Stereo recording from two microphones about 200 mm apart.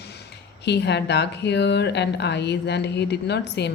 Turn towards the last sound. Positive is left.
turn(degrees=60)  # may be behind; listen again after turning